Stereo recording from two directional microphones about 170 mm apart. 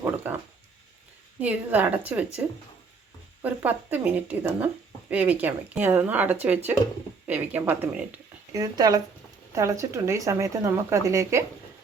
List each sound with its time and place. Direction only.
0.0 s a sound: 10° right (ahead or behind)
1.4 s speech: 10° right (ahead or behind)
3.4 s speech: 10° right (ahead or behind)